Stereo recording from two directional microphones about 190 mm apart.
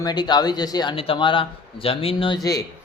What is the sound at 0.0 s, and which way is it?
Speech, 20° left (ahead or behind).